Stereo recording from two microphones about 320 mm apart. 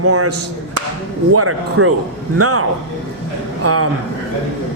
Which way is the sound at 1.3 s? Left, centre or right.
Right.